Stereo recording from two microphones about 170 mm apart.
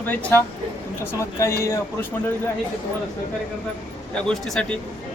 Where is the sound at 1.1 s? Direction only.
15° left (ahead or behind).